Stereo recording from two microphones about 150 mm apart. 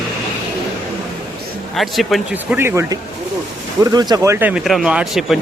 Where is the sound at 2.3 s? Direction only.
15° right (ahead or behind).